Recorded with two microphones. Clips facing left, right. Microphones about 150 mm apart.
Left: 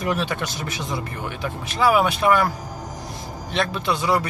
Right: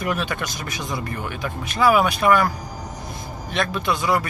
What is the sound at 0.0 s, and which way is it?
Speech, 30° left (ahead or behind).